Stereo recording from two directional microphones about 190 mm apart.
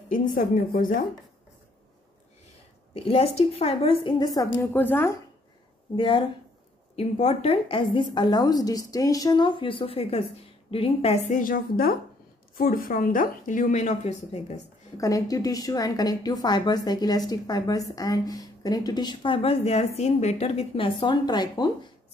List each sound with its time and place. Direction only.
0.1 s speech: 45° left (ahead or behind)
2.9 s a woman's voice: 30° left (ahead or behind); by 5.1 s 10° left (ahead or behind)
5.9 s a woman's voice: 25° left (ahead or behind)
15.0 s a woman's voice: 15° left (ahead or behind)